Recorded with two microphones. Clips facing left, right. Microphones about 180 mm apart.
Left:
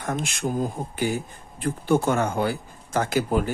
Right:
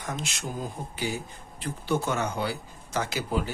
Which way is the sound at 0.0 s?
50° left (ahead or behind).